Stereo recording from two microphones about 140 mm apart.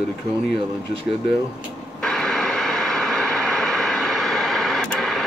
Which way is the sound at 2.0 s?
5° left (ahead or behind).